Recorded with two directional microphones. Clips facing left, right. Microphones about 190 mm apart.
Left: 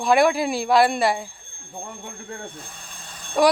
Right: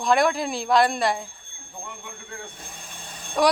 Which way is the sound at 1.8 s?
40° left (ahead or behind).